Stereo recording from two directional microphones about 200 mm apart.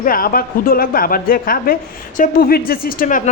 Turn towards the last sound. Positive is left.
turn(degrees=40)  # may be behind; listen again after turning